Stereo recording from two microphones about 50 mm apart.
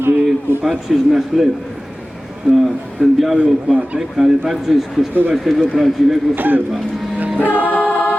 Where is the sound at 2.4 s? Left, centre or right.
Right.